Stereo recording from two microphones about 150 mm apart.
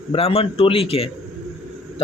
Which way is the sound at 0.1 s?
40° left (ahead or behind).